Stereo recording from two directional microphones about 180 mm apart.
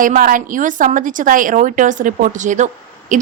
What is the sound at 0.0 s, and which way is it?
A woman's voice, 50° right (ahead or behind).